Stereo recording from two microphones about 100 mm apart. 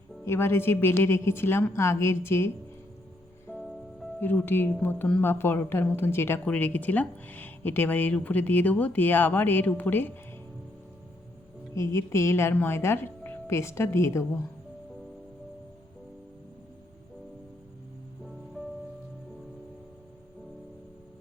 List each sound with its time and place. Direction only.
0.3 s speech: 25° left (ahead or behind)
3.5 s music: 15° left (ahead or behind)
4.2 s speech: 20° left (ahead or behind)
11.7 s speech: 30° left (ahead or behind)